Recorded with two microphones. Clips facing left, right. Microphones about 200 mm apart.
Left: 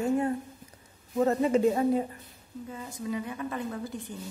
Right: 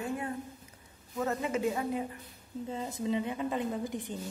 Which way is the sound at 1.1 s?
35° left (ahead or behind).